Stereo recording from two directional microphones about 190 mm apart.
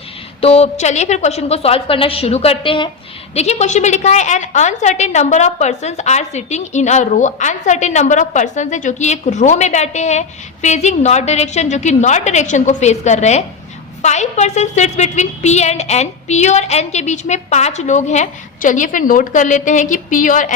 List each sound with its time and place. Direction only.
0.4 s a woman's voice: 35° left (ahead or behind)